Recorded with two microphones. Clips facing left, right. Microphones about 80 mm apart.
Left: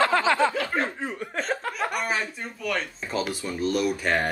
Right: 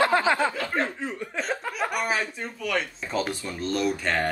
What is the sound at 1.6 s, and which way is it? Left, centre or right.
Speech, centre.